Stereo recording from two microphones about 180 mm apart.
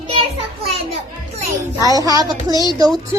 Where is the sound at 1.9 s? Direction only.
20° right (ahead or behind).